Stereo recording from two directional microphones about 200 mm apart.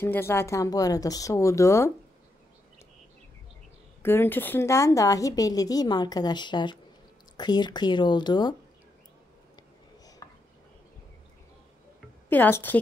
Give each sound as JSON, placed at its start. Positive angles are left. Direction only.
{"t": 0.0, "sound": "a woman's voice", "side_deg": 10}
{"t": 4.0, "sound": "a woman's voice", "side_deg": 10}
{"t": 10.0, "sound": "chopping", "side_deg": 20}
{"t": 12.3, "sound": "a woman's voice", "side_deg": 10}